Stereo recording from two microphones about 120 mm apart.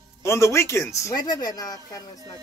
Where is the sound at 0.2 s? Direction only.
25° left (ahead or behind).